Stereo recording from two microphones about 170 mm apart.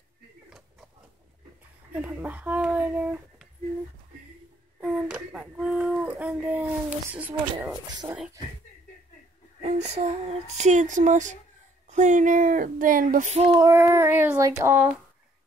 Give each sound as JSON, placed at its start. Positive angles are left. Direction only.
{"t": 2.0, "sound": "speech", "side_deg": -10}
{"t": 4.7, "sound": "a child's voice", "side_deg": -5}
{"t": 9.6, "sound": "a child's voice", "side_deg": -40}
{"t": 13.5, "sound": "child singing", "side_deg": -25}
{"t": 13.7, "sound": "speech", "side_deg": -15}